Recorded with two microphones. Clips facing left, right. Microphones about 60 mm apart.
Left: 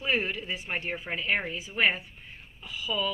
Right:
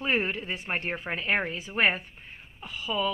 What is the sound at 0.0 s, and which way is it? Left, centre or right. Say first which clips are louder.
Speech: right 1 dB; right.